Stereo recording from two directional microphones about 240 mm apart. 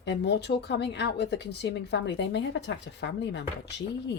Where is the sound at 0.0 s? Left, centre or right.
Left.